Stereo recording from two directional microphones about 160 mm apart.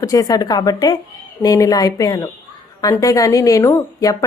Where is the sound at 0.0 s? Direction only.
20° left (ahead or behind).